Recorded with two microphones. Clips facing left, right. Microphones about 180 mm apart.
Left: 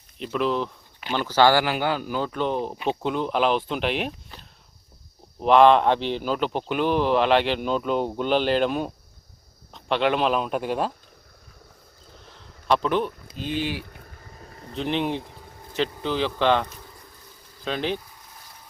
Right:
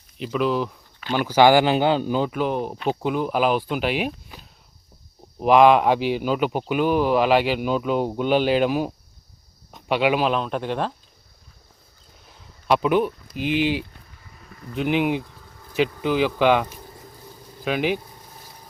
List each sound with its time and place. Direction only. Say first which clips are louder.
0.2 s a man's voice: right 2 dB; centre (ahead or behind)
12.6 s speech: right 3 dB; 5° right (ahead or behind)
14.1 s vehicle: left 3 dB; 45° left (ahead or behind)
14.8 s a man's voice: right 4 dB; 5° right (ahead or behind)